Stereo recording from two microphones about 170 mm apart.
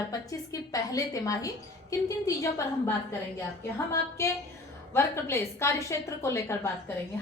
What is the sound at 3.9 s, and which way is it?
A woman's voice, 15° left (ahead or behind).